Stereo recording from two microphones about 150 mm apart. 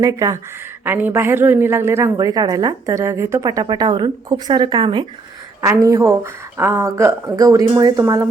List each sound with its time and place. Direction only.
0.0 s a woman's voice: 20° right (ahead or behind)
5.6 s a woman's voice: 20° right (ahead or behind)